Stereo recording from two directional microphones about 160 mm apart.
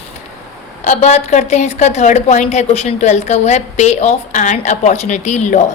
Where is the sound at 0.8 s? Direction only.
45° left (ahead or behind).